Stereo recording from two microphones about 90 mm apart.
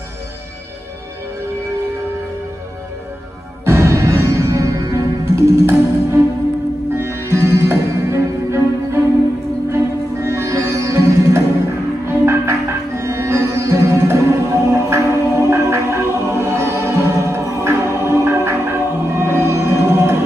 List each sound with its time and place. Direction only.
3.6 s music: 30° right (ahead or behind)
10.2 s sitar: 30° right (ahead or behind)
12.1 s music: 30° right (ahead or behind)